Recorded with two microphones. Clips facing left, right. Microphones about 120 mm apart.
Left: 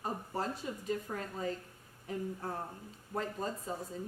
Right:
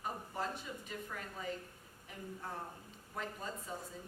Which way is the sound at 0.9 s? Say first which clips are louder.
Left 8 dB; 35° left (ahead or behind).